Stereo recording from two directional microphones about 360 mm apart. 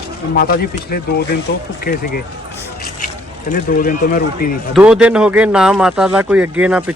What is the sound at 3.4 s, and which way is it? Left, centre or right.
Speech, left.